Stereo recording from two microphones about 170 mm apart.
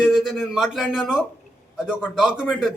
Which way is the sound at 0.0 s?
Centre (ahead or behind).